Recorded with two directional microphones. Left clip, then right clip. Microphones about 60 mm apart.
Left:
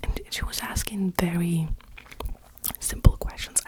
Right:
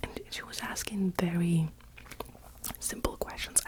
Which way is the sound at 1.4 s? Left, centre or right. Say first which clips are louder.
Left 2 dB; centre.